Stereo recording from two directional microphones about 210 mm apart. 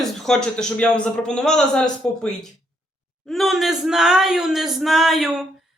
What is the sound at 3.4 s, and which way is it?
Speech, centre (ahead or behind).